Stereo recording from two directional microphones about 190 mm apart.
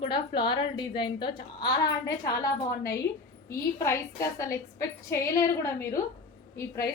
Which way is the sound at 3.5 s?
15° left (ahead or behind).